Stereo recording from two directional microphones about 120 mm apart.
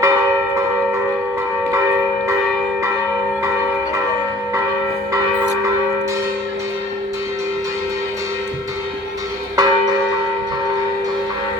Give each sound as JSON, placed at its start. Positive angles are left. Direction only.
{"t": 0.0, "sound": "church bell", "side_deg": -25}
{"t": 9.6, "sound": "church bell", "side_deg": -30}